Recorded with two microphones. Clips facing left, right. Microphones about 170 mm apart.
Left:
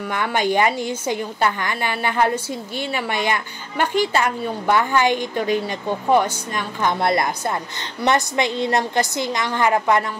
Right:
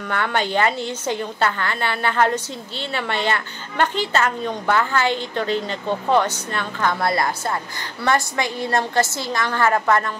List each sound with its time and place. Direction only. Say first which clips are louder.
0.1 s a woman's voice: left 1 dB; 10° left (ahead or behind)